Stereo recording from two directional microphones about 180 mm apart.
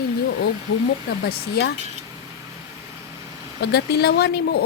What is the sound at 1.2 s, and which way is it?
Speech, 60° left (ahead or behind).